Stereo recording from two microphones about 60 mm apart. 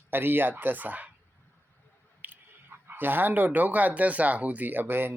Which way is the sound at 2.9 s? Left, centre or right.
Right.